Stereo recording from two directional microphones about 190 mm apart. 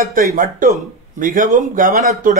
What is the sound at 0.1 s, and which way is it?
Speech, 50° right (ahead or behind).